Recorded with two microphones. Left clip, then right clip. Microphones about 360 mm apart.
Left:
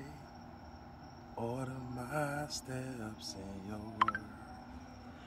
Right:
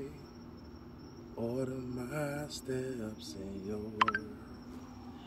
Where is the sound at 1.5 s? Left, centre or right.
Centre.